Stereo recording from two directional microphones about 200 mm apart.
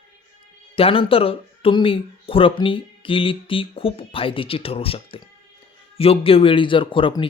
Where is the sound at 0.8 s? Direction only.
25° left (ahead or behind).